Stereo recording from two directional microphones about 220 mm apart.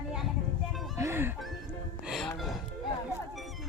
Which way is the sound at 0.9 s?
10° right (ahead or behind).